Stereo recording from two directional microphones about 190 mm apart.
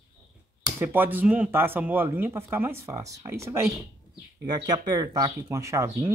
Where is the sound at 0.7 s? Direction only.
10° right (ahead or behind).